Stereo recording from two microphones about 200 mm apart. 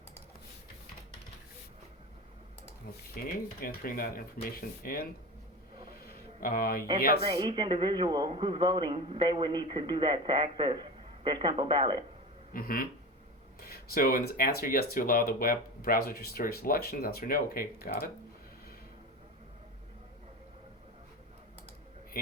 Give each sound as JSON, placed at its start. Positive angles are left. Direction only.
{"t": 3.2, "sound": "speech", "side_deg": 50}
{"t": 6.0, "sound": "a sound", "side_deg": 50}
{"t": 7.3, "sound": "a man's voice", "side_deg": -20}
{"t": 12.5, "sound": "speech", "side_deg": 45}